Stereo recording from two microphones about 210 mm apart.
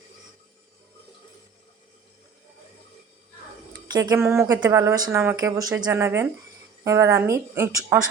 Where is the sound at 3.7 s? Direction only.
15° right (ahead or behind).